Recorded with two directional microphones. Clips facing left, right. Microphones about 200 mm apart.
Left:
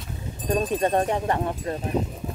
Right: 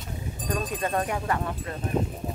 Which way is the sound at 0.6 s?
35° left (ahead or behind).